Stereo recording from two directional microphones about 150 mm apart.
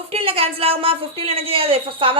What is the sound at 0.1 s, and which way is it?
A woman's voice, 40° right (ahead or behind).